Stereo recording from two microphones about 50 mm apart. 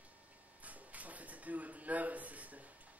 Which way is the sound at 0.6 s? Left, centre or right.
Right.